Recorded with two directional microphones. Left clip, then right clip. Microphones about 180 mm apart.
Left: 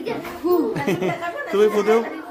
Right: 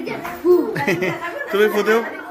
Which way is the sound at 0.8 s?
20° left (ahead or behind).